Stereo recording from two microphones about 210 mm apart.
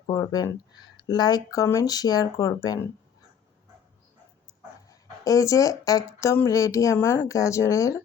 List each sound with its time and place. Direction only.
0.1 s speech: 15° left (ahead or behind)
4.9 s speech: 15° left (ahead or behind)